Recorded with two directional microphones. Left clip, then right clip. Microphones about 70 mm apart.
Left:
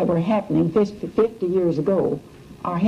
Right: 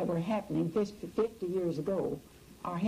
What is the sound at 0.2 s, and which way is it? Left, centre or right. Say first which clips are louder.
Speech: left 12 dB; centre.